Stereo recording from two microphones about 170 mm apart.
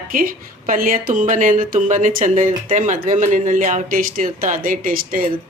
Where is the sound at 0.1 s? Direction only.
55° right (ahead or behind).